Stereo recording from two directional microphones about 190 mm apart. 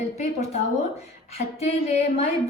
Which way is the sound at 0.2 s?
35° left (ahead or behind).